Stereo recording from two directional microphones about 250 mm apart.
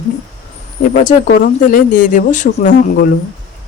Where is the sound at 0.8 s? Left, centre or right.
Left.